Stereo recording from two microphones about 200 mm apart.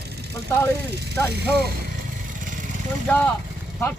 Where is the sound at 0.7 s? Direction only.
55° right (ahead or behind).